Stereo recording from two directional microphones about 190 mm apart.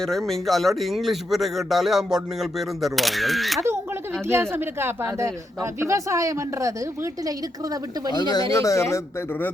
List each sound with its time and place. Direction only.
0.0 s speech: centre (ahead or behind)
4.3 s a woman's voice: 10° right (ahead or behind)
8.1 s speech: 20° left (ahead or behind)